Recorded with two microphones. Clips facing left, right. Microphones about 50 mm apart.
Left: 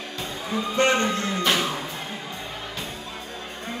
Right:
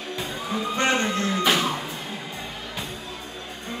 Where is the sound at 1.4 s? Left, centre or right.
Centre.